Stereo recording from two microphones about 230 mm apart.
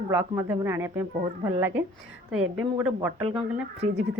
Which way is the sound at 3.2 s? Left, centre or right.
Right.